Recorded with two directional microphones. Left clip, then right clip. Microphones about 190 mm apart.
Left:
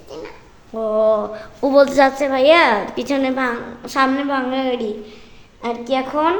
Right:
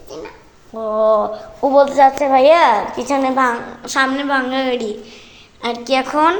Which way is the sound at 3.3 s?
15° left (ahead or behind).